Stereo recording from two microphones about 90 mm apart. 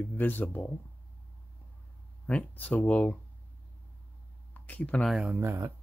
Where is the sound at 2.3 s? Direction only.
15° left (ahead or behind).